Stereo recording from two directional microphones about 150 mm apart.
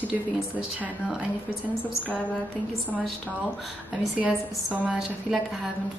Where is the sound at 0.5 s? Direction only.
5° right (ahead or behind).